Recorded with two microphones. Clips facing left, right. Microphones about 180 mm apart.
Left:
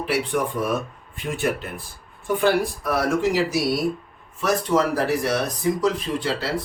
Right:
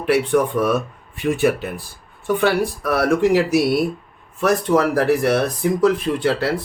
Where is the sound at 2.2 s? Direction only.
70° right (ahead or behind).